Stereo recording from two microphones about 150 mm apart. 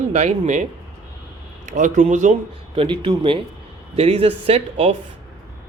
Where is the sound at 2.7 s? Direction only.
35° right (ahead or behind).